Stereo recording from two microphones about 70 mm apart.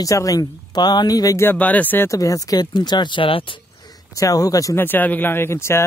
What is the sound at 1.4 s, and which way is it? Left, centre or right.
Speech, left.